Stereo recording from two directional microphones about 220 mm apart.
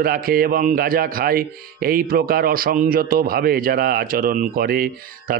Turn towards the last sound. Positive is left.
turn(degrees=-45)  # may be behind; listen again after turning